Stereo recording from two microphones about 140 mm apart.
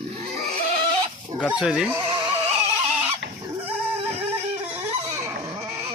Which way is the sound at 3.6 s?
15° right (ahead or behind).